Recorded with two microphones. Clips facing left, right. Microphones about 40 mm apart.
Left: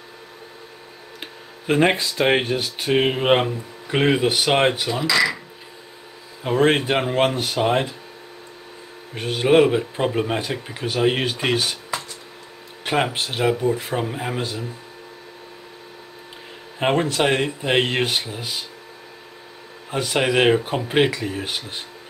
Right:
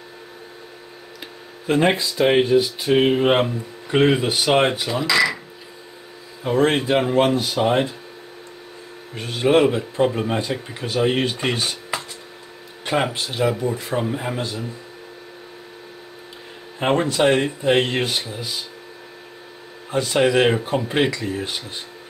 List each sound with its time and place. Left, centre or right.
1.2 s a sound: left
2.0 s speech: left
2.9 s speech: centre
4.7 s speech: centre
6.4 s speech: centre
7.3 s speech: left
7.6 s speech: centre
9.1 s speech: left
12.8 s speech: centre
13.1 s speech: left
13.7 s speech: centre
16.8 s speech: centre
20.1 s speech: centre